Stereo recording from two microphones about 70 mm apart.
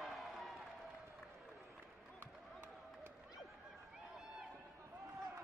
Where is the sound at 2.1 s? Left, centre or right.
Right.